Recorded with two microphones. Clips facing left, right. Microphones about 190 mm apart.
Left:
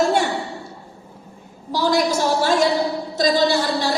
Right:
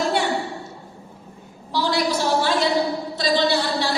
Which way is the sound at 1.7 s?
45° left (ahead or behind).